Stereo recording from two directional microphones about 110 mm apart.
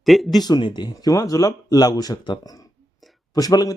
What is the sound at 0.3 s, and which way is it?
A man's voice, 40° left (ahead or behind).